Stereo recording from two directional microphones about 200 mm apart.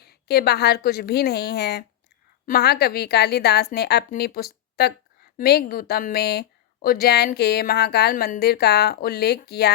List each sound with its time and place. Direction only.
0.0 s a woman's voice: 50° left (ahead or behind)